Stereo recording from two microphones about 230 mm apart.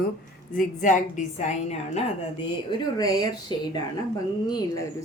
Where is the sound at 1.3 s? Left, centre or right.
Left.